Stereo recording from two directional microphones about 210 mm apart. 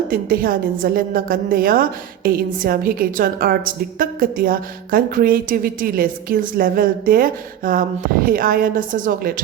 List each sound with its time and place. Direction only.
0.1 s a woman's voice: 45° right (ahead or behind)